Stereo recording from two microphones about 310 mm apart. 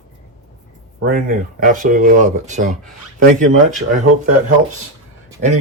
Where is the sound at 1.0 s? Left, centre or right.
Right.